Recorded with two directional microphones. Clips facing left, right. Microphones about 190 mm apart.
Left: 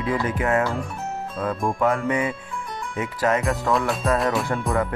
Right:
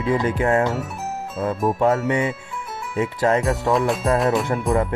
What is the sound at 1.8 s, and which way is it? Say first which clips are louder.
Music: right 2 dB; 25° right (ahead or behind).